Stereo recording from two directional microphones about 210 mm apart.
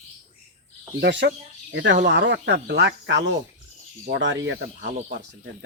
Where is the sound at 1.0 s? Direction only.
55° right (ahead or behind).